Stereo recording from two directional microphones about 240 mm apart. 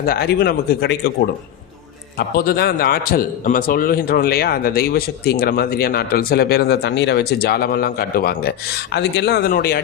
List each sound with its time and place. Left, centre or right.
0.0 s a man's voice: left
2.1 s a man's voice: left